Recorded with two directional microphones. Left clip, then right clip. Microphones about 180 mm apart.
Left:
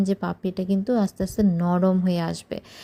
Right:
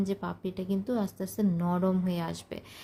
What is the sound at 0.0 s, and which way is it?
A woman's voice, 30° left (ahead or behind).